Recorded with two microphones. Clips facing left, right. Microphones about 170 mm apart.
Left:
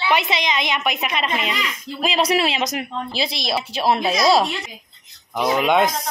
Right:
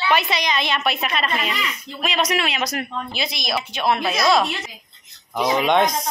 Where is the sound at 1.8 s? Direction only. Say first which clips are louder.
Left 4 dB; 30° left (ahead or behind).